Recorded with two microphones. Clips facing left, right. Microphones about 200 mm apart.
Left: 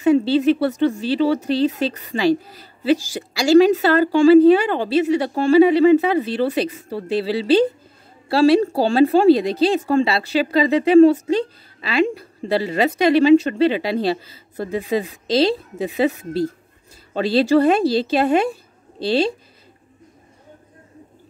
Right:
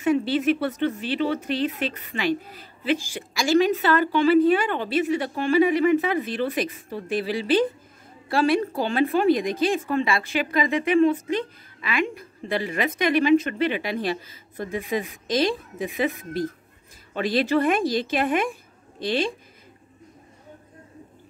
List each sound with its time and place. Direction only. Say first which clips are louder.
0.0 s a woman's voice: left 6 dB; 30° left (ahead or behind)